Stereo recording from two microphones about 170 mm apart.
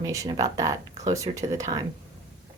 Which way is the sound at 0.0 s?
20° right (ahead or behind).